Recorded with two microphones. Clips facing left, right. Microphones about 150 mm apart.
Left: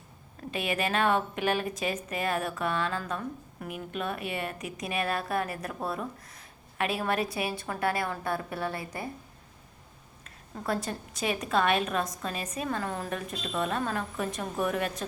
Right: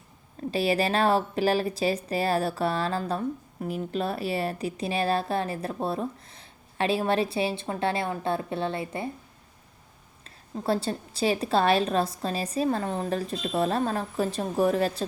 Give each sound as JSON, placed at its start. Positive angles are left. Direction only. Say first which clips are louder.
{"t": 0.5, "sound": "speech", "louder": "right 5 dB", "side_deg": -35}
{"t": 10.2, "sound": "a woman's voice", "louder": "right 5 dB", "side_deg": -30}